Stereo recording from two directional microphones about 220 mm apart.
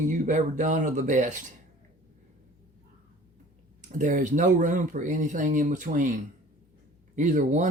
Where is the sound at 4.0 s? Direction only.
35° right (ahead or behind).